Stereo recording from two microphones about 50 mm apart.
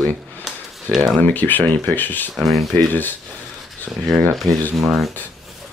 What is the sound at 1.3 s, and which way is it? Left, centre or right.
Speech, left.